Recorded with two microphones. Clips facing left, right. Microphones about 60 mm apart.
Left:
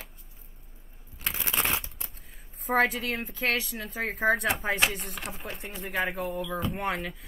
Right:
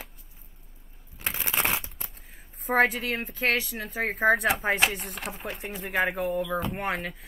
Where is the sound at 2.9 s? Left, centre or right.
Centre.